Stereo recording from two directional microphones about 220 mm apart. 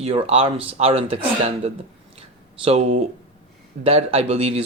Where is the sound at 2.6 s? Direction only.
30° right (ahead or behind).